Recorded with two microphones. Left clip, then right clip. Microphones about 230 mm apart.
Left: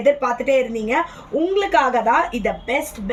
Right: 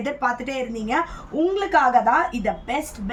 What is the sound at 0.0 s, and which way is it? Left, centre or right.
Speech, centre.